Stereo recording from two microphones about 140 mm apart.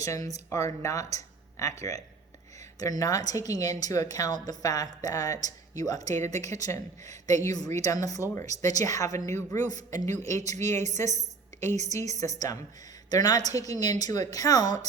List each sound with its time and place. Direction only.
0.0 s a woman's voice: 25° left (ahead or behind)
10.5 s a woman's voice: 55° right (ahead or behind)
12.1 s a woman's voice: 25° left (ahead or behind)